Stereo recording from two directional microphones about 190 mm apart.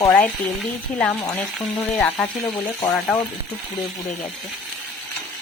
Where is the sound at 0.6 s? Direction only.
5° left (ahead or behind).